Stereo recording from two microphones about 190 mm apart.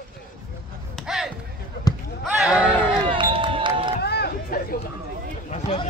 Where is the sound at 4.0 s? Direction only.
60° left (ahead or behind).